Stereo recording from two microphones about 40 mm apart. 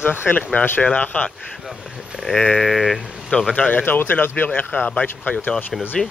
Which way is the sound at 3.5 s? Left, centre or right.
Left.